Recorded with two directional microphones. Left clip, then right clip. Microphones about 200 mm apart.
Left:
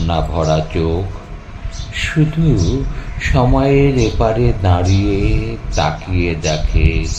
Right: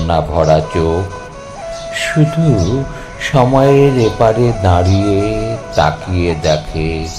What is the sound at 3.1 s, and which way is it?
Speech, 10° right (ahead or behind).